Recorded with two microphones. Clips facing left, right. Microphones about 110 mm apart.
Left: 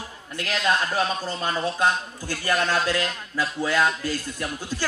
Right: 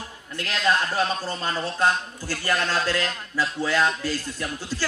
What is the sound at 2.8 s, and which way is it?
Speech, 15° left (ahead or behind).